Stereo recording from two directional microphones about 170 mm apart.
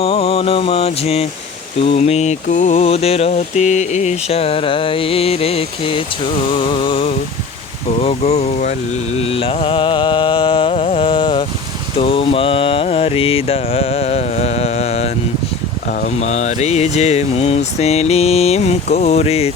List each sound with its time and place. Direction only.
0.0 s mantra: 35° left (ahead or behind)
6.6 s music: 30° left (ahead or behind)
8.0 s mantra: 35° left (ahead or behind)
15.9 s mantra: 50° left (ahead or behind)